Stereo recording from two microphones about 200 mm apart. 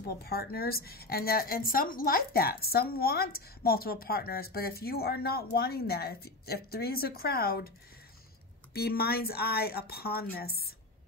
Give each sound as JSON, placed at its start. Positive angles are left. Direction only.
{"t": 0.0, "sound": "a woman's voice", "side_deg": 50}
{"t": 8.7, "sound": "a woman's voice", "side_deg": 50}